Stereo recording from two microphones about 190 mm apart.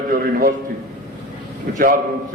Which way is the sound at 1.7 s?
50° right (ahead or behind).